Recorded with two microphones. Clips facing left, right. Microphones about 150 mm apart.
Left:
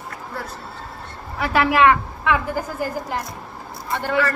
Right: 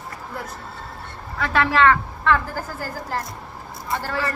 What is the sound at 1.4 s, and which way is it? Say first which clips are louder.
A woman's voice: left 2 dB; 15° left (ahead or behind).